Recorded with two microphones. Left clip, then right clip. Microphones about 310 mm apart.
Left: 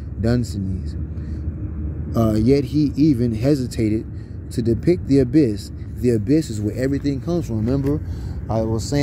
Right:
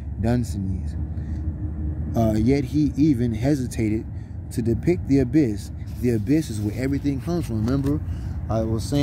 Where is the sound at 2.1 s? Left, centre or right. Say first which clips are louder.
Left 4 dB; centre.